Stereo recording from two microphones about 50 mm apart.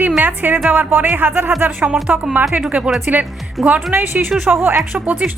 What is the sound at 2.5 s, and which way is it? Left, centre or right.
Speech, right.